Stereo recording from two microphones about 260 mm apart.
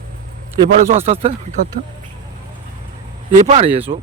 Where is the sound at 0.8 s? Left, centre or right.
Right.